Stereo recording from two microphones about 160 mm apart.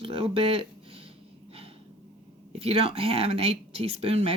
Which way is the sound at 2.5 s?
40° right (ahead or behind).